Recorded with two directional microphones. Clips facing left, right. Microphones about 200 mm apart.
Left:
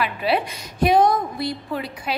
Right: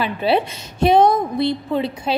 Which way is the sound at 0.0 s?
25° right (ahead or behind).